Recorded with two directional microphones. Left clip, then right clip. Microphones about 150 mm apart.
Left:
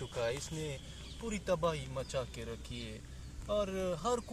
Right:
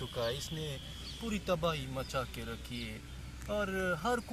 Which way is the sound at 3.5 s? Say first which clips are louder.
Even; 20° left (ahead or behind).